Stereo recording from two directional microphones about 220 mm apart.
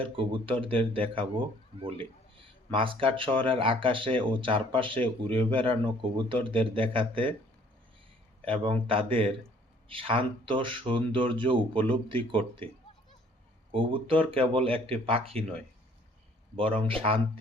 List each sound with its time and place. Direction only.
0.0 s speech: 25° right (ahead or behind)
8.4 s speech: 25° right (ahead or behind)
13.7 s speech: 25° right (ahead or behind)
16.6 s speech: 25° right (ahead or behind)